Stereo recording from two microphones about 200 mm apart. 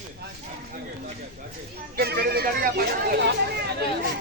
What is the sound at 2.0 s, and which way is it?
Speech, 50° right (ahead or behind).